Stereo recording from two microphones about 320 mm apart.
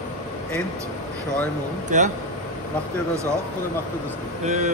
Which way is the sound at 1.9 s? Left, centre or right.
Right.